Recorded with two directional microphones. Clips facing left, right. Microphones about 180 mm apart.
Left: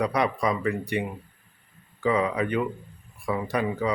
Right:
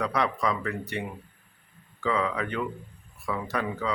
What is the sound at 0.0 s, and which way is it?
Speech, 15° left (ahead or behind).